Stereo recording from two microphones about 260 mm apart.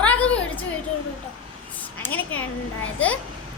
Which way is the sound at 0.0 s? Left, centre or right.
Centre.